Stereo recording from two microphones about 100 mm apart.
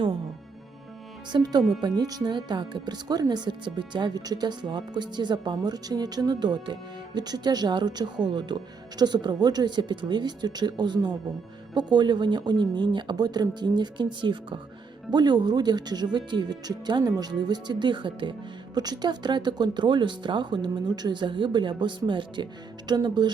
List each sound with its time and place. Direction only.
1.3 s speech: 45° right (ahead or behind)